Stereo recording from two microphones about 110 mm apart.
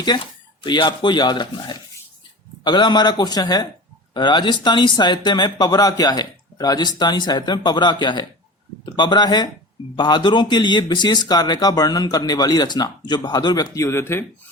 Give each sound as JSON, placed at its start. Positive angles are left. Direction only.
{"t": 0.6, "sound": "speech", "side_deg": 45}